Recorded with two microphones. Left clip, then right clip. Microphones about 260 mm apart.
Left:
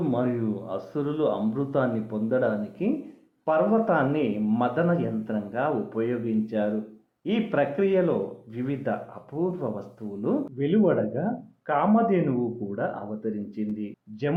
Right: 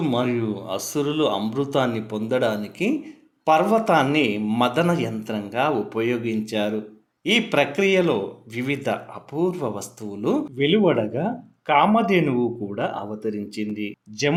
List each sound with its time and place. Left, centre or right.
0.1 s speech: right